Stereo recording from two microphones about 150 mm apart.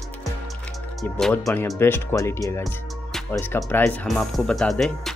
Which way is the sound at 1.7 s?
15° left (ahead or behind).